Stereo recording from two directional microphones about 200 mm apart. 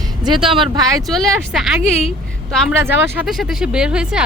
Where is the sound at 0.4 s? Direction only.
25° right (ahead or behind).